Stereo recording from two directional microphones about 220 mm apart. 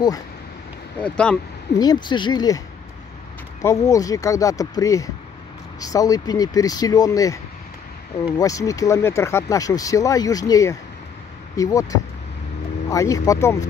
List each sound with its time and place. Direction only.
1.0 s speech: 5° left (ahead or behind)
1.8 s speech: 20° left (ahead or behind)
3.6 s speech: 15° left (ahead or behind)
8.4 s speech: 15° left (ahead or behind)